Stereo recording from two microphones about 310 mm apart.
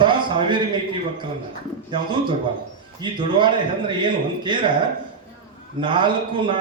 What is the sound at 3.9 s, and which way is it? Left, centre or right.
Speech, centre.